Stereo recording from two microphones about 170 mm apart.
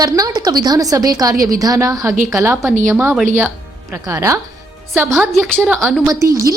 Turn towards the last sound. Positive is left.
turn(degrees=-20)  # may be behind; listen again after turning